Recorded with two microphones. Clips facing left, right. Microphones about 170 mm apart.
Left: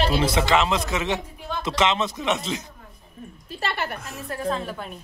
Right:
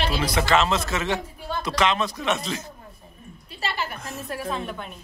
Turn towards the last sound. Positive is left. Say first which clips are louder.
# left 1 dB
turn(degrees=5)  # may be behind; listen again after turning